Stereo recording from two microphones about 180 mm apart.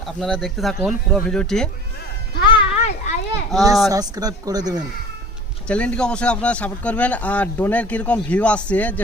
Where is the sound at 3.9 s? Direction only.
20° right (ahead or behind).